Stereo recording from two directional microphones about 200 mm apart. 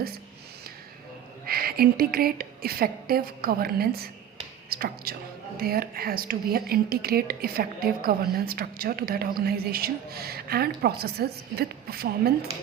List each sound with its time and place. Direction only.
1.5 s speech: 50° right (ahead or behind)